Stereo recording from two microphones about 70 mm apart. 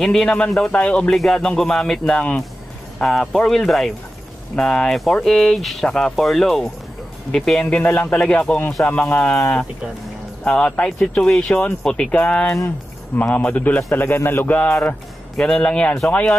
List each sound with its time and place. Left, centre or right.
0.0 s speech: centre
1.1 s a man's voice: centre; by 9.3 s left
10.4 s a man's voice: centre
15.3 s speech: centre